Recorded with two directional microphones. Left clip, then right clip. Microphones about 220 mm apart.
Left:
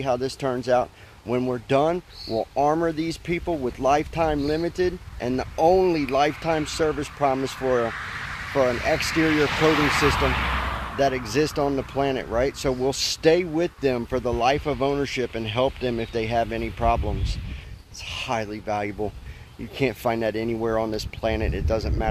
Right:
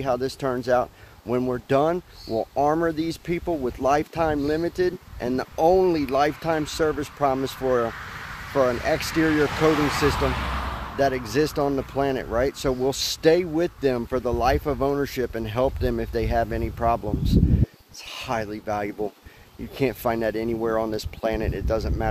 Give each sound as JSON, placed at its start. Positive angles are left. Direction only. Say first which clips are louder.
{"t": 0.0, "sound": "speech", "louder": "even", "side_deg": -10}
{"t": 7.9, "sound": "vehicle", "louder": "left 4 dB", "side_deg": -50}
{"t": 9.1, "sound": "speech", "louder": "left 1 dB", "side_deg": -40}
{"t": 10.3, "sound": "a sound", "louder": "left 4 dB", "side_deg": 25}
{"t": 11.0, "sound": "speech", "louder": "even", "side_deg": -5}